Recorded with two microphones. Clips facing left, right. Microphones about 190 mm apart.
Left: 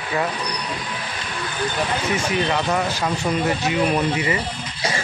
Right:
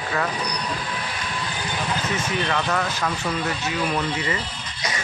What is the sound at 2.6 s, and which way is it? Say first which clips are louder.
Speech: left 3 dB; 25° left (ahead or behind).